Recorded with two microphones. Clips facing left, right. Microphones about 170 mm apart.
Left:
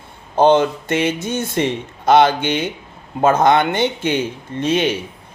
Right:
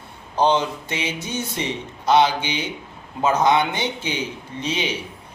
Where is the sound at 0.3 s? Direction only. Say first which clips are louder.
Left 6 dB; 50° left (ahead or behind).